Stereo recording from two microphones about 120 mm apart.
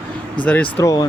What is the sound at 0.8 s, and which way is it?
Speech, 25° left (ahead or behind).